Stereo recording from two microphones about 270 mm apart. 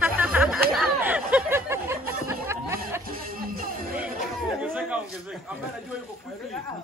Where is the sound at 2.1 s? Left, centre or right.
Centre.